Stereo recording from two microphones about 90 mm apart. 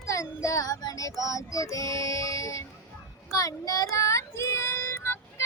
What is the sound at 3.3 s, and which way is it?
Child singing, 45° left (ahead or behind).